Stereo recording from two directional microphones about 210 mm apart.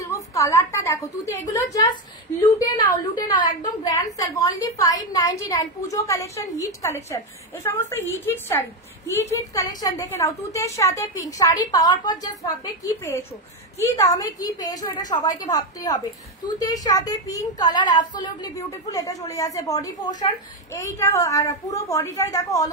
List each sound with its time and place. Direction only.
0.0 s a woman's voice: 15° left (ahead or behind)
3.3 s a woman's voice: 20° left (ahead or behind)